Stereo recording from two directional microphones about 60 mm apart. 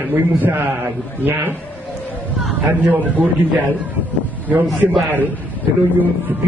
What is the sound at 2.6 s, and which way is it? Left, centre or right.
Speech, right.